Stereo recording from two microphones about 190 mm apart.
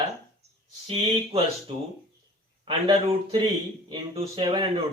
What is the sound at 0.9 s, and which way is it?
Speech, 30° right (ahead or behind).